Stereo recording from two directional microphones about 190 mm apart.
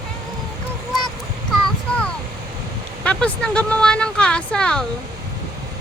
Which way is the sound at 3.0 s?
5° left (ahead or behind).